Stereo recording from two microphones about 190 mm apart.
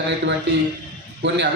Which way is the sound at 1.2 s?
70° right (ahead or behind).